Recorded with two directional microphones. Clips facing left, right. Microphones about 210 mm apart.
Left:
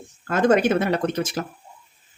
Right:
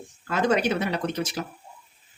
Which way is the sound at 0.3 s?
50° left (ahead or behind).